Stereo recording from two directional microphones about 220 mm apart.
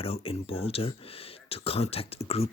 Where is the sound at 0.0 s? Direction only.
25° left (ahead or behind).